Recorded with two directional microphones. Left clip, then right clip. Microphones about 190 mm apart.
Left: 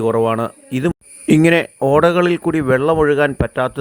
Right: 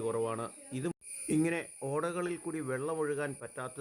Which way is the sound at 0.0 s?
40° left (ahead or behind).